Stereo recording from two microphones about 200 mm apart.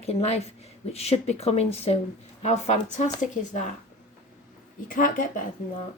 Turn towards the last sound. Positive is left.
turn(degrees=40)  # may be behind; listen again after turning